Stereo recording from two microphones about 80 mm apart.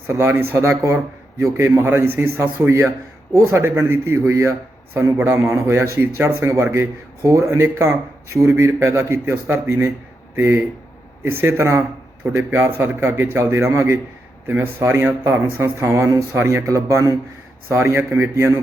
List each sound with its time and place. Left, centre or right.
0.1 s a man's voice: right